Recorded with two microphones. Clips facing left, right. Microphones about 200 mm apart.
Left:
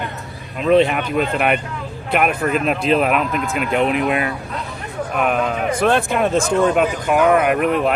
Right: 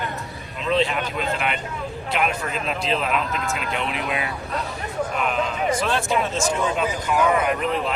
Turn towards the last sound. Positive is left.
turn(degrees=60)  # may be behind; listen again after turning